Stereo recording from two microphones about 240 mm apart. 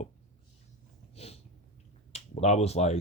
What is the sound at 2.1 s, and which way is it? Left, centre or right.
Speech, left.